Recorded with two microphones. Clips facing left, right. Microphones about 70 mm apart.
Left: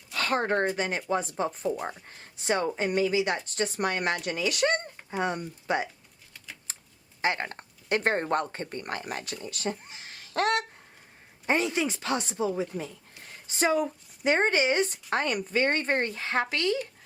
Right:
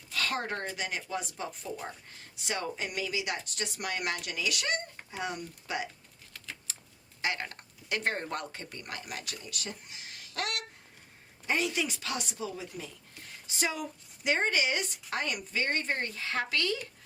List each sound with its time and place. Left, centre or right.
0.1 s speech: left
6.3 s typing: centre
7.2 s a woman's voice: left